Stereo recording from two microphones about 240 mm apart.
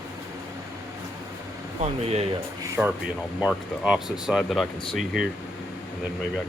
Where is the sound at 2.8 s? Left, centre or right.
Centre.